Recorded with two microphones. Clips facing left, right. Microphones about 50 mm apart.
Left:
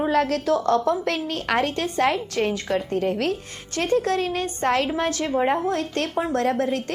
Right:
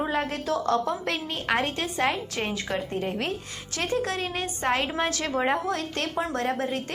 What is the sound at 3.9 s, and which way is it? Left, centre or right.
Speech, right.